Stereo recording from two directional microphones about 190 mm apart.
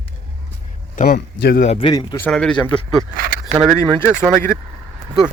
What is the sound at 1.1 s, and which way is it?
Speech, 60° left (ahead or behind).